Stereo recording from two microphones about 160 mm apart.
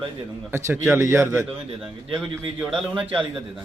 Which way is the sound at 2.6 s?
5° right (ahead or behind).